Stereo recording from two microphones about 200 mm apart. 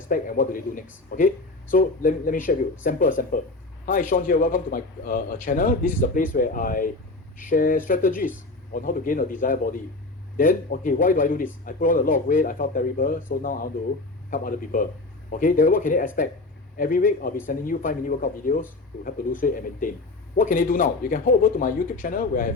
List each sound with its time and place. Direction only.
0.1 s a man's voice: 45° left (ahead or behind)